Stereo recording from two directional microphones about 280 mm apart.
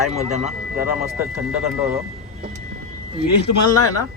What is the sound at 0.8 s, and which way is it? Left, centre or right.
Speech, centre.